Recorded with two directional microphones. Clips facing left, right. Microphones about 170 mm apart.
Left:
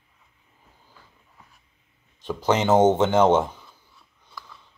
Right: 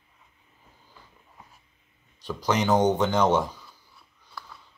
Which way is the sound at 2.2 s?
25° left (ahead or behind).